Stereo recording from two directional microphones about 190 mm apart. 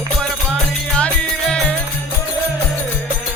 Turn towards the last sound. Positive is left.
turn(degrees=5)  # may be behind; listen again after turning